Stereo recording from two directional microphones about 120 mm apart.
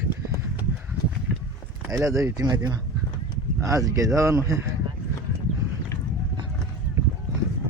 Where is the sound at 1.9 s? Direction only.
25° right (ahead or behind).